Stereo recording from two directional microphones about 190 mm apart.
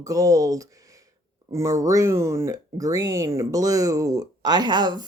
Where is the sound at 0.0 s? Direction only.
15° right (ahead or behind).